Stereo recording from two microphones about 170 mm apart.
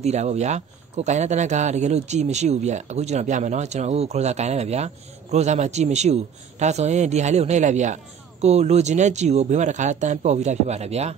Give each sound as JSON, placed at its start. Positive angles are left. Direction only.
{"t": 0.0, "sound": "speech", "side_deg": -40}